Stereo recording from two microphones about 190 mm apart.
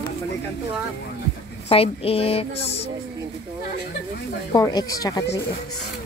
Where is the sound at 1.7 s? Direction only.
30° left (ahead or behind).